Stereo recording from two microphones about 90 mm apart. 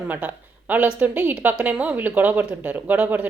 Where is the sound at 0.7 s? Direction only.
15° right (ahead or behind).